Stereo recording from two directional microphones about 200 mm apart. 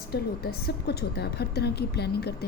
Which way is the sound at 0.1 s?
50° left (ahead or behind).